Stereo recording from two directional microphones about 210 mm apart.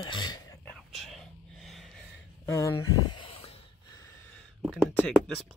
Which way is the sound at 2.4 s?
15° left (ahead or behind).